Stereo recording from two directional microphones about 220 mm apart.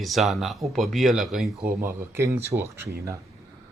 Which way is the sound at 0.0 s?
Centre (ahead or behind).